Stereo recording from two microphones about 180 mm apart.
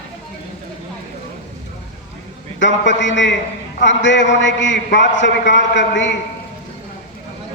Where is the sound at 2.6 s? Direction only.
85° left.